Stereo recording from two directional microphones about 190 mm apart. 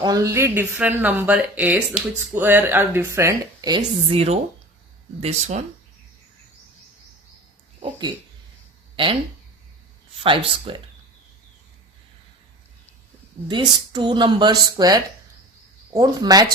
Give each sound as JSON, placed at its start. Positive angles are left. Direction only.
{"t": 0.0, "sound": "speech", "side_deg": -15}
{"t": 7.8, "sound": "speech", "side_deg": -25}
{"t": 10.2, "sound": "speech", "side_deg": -25}
{"t": 13.5, "sound": "speech", "side_deg": -25}